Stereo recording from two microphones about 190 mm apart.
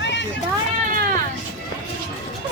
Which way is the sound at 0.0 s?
70° left (ahead or behind).